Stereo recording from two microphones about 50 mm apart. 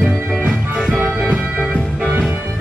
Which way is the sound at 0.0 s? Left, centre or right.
Centre.